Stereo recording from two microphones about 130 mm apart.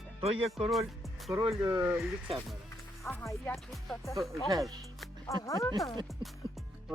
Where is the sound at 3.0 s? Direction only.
15° left (ahead or behind).